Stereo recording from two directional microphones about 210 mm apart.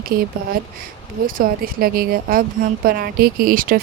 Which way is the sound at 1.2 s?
40° right (ahead or behind).